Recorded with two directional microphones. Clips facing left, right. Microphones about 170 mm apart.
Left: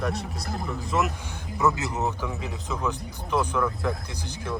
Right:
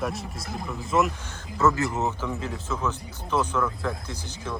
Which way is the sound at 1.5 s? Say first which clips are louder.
Right 2 dB; 15° left (ahead or behind).